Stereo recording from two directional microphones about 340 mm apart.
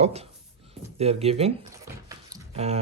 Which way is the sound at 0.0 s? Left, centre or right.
Centre.